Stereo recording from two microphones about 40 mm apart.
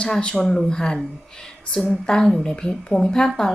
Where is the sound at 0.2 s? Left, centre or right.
Left.